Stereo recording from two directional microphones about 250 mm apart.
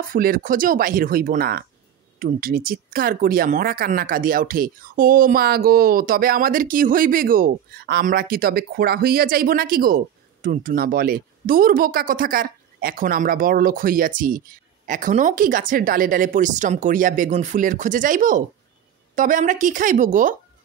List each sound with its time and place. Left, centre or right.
0.1 s speech: right